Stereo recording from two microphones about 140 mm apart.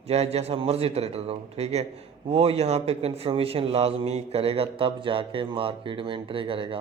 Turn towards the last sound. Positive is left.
turn(degrees=-40)  # may be behind; listen again after turning